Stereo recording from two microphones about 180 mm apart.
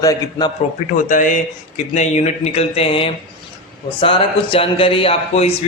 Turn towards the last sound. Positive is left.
turn(degrees=35)  # may be behind; listen again after turning